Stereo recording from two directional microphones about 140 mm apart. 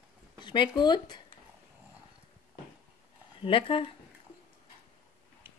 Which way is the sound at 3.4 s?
40° left (ahead or behind).